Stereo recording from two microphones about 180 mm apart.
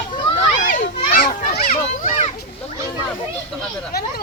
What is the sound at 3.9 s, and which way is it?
Speech, 60° left (ahead or behind).